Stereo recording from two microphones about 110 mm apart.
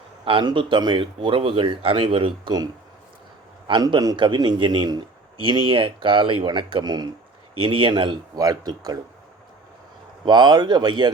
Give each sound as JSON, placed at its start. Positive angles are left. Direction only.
{"t": 0.3, "sound": "speech", "side_deg": -50}
{"t": 3.7, "sound": "a man's voice", "side_deg": -40}
{"t": 7.6, "sound": "speech", "side_deg": -50}
{"t": 8.4, "sound": "a man's voice", "side_deg": -35}
{"t": 10.2, "sound": "a man's voice", "side_deg": -40}